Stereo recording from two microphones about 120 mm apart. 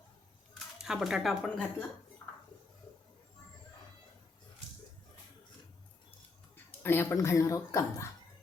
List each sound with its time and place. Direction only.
0.8 s speech: 5° right (ahead or behind)
6.7 s speech: 20° left (ahead or behind)